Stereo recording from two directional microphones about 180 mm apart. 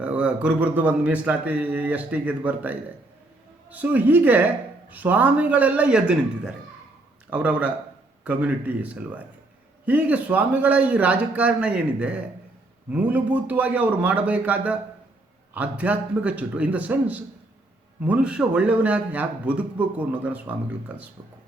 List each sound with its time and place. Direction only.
0.0 s speech: 5° right (ahead or behind)